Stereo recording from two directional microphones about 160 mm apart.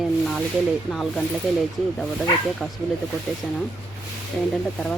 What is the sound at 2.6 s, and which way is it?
Speech, 5° left (ahead or behind).